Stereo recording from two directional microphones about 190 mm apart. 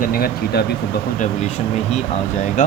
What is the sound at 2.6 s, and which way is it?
Speech, 40° left (ahead or behind).